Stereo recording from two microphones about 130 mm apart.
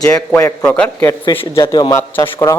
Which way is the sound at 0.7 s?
15° left (ahead or behind).